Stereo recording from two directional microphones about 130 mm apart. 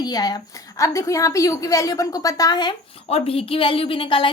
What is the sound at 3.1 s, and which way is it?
A woman's voice, 50° left (ahead or behind).